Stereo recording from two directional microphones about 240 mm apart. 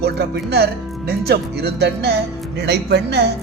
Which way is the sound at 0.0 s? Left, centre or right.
Right.